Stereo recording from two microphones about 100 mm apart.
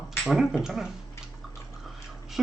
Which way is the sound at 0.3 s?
Centre (ahead or behind).